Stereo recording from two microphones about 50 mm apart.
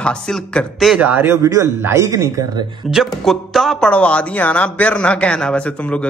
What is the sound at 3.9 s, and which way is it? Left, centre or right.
Speech, left.